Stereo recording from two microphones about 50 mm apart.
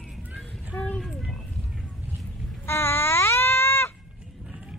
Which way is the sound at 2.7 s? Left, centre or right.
Left.